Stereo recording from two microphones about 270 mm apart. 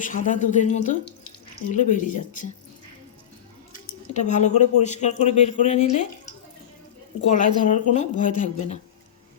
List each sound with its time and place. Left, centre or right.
0.0 s speech: left
4.1 s speech: left
7.3 s speech: left